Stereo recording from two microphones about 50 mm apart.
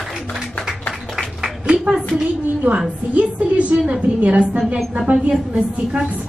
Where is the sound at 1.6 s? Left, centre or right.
Centre.